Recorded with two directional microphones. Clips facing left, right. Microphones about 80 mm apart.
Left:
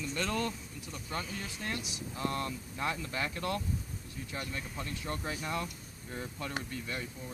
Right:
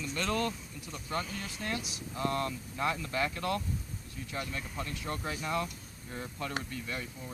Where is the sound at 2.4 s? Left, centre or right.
Centre.